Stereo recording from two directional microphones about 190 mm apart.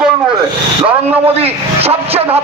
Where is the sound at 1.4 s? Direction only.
30° right (ahead or behind).